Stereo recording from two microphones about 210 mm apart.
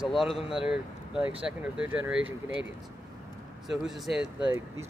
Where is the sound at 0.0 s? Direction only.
Centre (ahead or behind).